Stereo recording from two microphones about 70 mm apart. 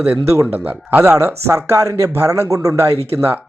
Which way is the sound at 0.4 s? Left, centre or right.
Right.